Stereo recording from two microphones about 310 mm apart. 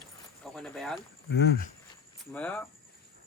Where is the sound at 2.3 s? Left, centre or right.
Centre.